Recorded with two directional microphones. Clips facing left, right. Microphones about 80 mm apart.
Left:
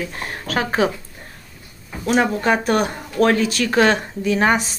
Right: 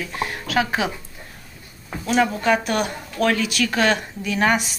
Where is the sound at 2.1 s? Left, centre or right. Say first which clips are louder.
Left 1 dB; left.